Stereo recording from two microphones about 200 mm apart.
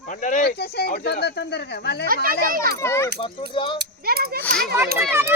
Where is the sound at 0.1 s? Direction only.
40° left (ahead or behind).